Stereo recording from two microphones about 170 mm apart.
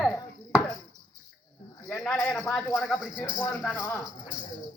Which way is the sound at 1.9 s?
Centre (ahead or behind).